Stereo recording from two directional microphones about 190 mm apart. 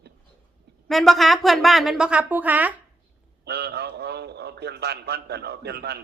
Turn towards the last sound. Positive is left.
turn(degrees=-60)  # may be behind; listen again after turning